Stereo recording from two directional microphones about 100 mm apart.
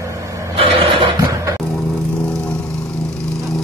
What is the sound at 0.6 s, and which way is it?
Vehicle, 65° right (ahead or behind).